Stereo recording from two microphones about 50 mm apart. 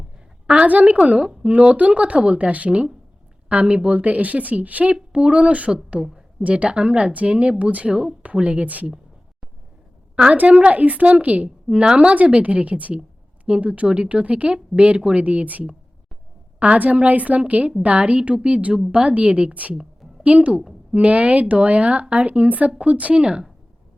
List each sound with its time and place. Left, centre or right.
0.4 s a woman's voice: right
6.0 s a woman's voice: centre
6.4 s a woman's voice: right
7.9 s speech: centre
8.2 s a woman's voice: right
10.3 s a woman's voice: right